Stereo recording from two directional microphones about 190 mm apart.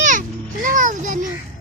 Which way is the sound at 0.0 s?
40° right (ahead or behind).